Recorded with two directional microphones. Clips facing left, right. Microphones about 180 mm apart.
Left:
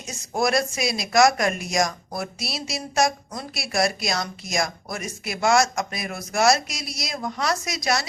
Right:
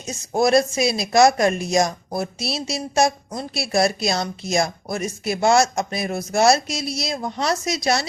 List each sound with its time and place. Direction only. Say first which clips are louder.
0.1 s speech: right 6 dB; 25° right (ahead or behind)